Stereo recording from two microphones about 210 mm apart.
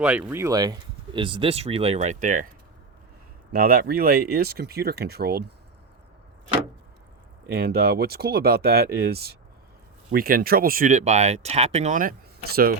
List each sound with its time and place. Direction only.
0.0 s speech: 5° right (ahead or behind); by 2.5 s 40° right (ahead or behind)
3.5 s speech: 45° right (ahead or behind)
7.4 s speech: 50° right (ahead or behind)